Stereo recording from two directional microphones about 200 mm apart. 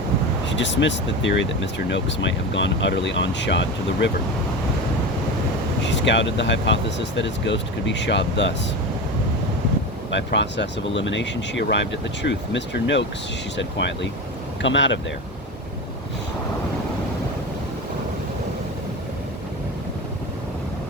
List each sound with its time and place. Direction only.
0.4 s speech: 65° left (ahead or behind)
5.8 s speech: 65° left (ahead or behind)
10.1 s speech: 65° left (ahead or behind)